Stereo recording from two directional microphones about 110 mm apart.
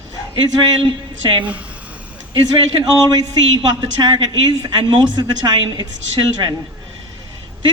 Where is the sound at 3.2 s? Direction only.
40° right (ahead or behind).